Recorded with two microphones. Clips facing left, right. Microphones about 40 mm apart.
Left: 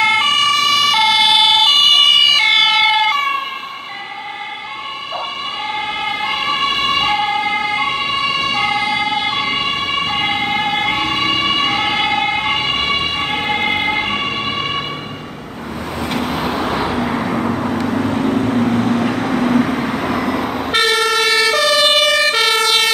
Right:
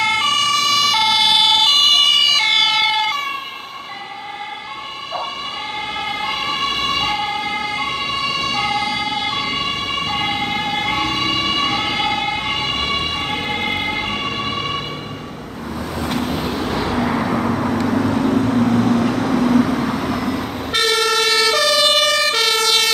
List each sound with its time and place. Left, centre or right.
0.0 s emergency vehicle: centre
5.7 s emergency vehicle: centre
16.0 s vehicle: centre